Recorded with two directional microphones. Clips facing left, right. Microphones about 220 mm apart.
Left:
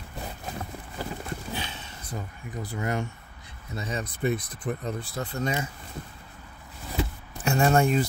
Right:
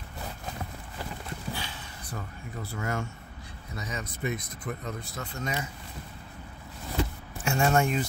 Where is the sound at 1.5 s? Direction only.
20° left (ahead or behind).